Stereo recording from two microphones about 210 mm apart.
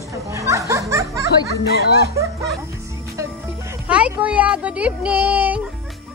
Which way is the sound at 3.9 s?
5° right (ahead or behind).